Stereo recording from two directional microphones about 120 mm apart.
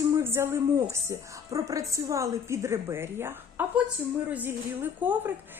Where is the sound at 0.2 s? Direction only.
20° right (ahead or behind).